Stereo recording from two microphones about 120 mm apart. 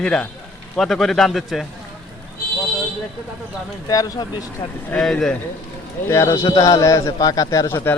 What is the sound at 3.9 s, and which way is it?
Speech, 30° left (ahead or behind).